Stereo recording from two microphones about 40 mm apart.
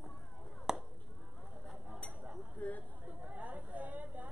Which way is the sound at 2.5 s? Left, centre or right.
Left.